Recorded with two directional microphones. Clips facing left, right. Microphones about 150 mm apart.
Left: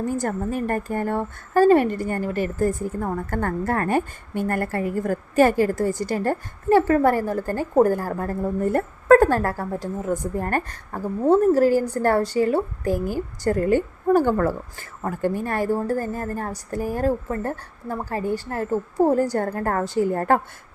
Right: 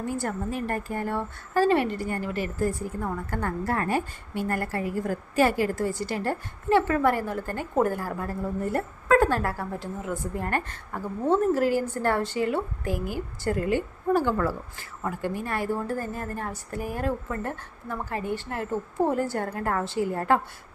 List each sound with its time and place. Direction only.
0.0 s a woman's voice: 45° left (ahead or behind)